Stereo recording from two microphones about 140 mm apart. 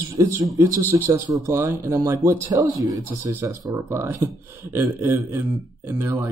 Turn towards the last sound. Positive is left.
turn(degrees=-20)  # may be behind; listen again after turning